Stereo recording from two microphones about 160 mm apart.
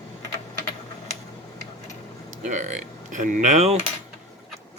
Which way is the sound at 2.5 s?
50° right (ahead or behind).